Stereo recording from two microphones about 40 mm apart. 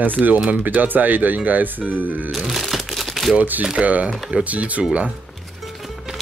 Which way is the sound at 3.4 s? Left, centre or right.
Right.